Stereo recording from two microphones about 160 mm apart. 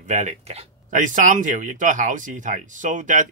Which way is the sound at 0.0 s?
50° right (ahead or behind).